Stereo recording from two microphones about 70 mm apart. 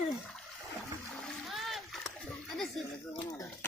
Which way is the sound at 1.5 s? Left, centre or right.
Centre.